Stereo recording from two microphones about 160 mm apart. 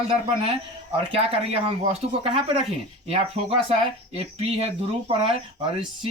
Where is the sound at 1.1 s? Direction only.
40° right (ahead or behind).